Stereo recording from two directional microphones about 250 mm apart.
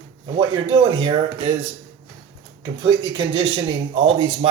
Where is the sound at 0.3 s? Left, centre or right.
Right.